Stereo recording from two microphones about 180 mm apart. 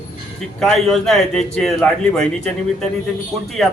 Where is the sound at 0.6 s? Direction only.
Centre (ahead or behind).